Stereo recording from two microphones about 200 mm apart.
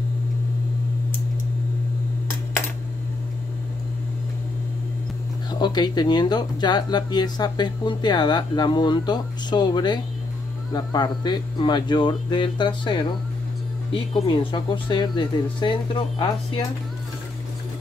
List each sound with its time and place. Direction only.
5.5 s speech: 20° left (ahead or behind)
14.2 s speech: 25° left (ahead or behind)